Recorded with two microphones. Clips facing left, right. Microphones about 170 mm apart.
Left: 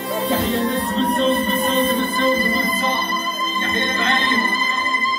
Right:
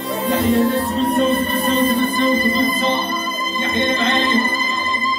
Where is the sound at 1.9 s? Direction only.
15° right (ahead or behind).